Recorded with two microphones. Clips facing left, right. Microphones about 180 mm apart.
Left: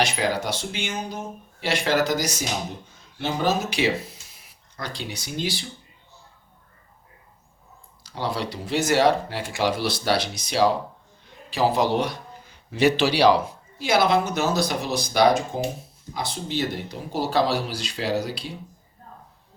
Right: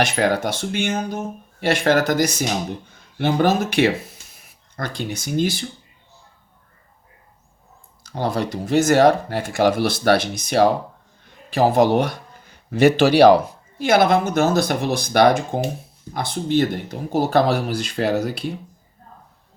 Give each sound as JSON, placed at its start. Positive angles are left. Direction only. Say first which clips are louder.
{"t": 0.0, "sound": "speech", "louder": "right 5 dB", "side_deg": -55}
{"t": 8.0, "sound": "speech", "louder": "right 5 dB", "side_deg": -50}